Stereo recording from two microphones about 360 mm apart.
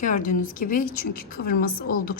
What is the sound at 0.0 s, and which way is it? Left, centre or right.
A woman's voice, left.